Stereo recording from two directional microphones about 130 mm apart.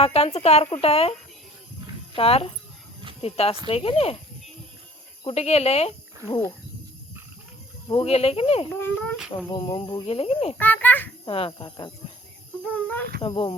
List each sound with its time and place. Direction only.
0.0 s speech: 50° left (ahead or behind)
2.1 s speech: 50° left (ahead or behind)
5.2 s speech: 55° left (ahead or behind)
7.9 s speech: 45° left (ahead or behind)
8.7 s a child's voice: 15° left (ahead or behind)
9.1 s speech: 5° right (ahead or behind)
9.5 s speech: 35° left (ahead or behind)
10.6 s a child's voice: 15° left (ahead or behind)
11.3 s speech: 45° left (ahead or behind)
12.7 s a child's voice: 15° left (ahead or behind)
13.2 s speech: 40° left (ahead or behind)